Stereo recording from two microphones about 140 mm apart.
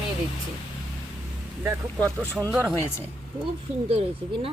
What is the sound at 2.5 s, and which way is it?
Speech, 5° right (ahead or behind).